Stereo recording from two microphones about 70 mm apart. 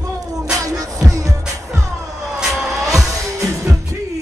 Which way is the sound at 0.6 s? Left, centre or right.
Right.